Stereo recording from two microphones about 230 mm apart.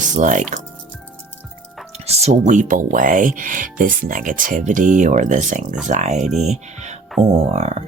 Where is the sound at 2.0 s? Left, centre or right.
Right.